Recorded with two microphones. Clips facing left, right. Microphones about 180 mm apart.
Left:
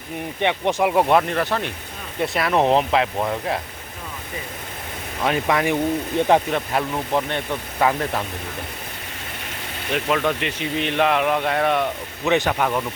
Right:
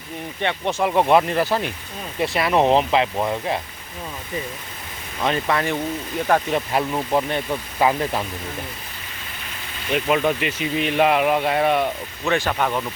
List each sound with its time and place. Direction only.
0.3 s speech: 15° left (ahead or behind); by 3.6 s centre (ahead or behind)
5.2 s speech: 10° left (ahead or behind)
6.5 s speech: 5° right (ahead or behind)
9.9 s speech: 10° right (ahead or behind)
12.2 s speech: 20° left (ahead or behind)
12.5 s speech: 5° left (ahead or behind)